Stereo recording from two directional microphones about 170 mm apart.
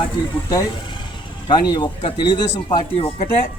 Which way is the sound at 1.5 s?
25° left (ahead or behind).